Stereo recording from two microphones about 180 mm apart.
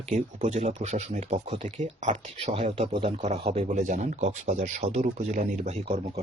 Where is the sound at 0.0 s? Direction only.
40° right (ahead or behind).